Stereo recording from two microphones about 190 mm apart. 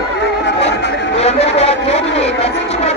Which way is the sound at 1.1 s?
35° left (ahead or behind).